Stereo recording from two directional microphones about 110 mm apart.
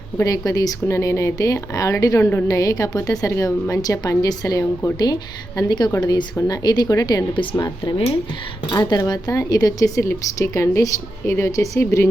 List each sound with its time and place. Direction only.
0.2 s speech: 35° left (ahead or behind)